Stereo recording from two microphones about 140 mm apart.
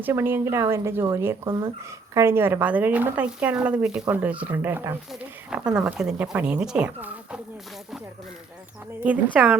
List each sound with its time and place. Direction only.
0.0 s speech: 15° right (ahead or behind)
9.0 s speech: 10° right (ahead or behind)